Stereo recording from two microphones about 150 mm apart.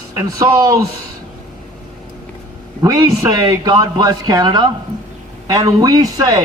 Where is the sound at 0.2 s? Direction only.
25° right (ahead or behind).